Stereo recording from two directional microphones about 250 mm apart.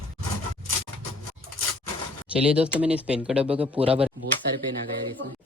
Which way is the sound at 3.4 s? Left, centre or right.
Right.